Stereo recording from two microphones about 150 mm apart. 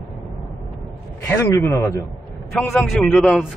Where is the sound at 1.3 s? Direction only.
15° left (ahead or behind).